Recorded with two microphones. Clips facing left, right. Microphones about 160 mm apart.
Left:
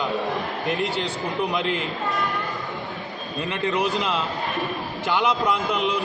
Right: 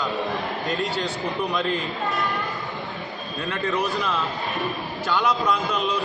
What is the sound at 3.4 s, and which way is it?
A man's voice, 20° left (ahead or behind).